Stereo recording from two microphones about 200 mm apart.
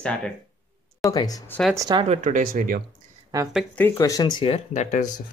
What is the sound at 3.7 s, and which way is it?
Speech, 10° left (ahead or behind).